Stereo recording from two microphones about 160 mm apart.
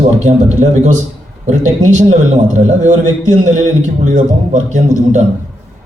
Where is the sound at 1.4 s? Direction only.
50° right (ahead or behind).